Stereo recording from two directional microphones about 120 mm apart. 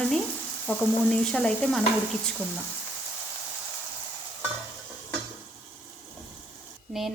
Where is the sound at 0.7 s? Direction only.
10° left (ahead or behind).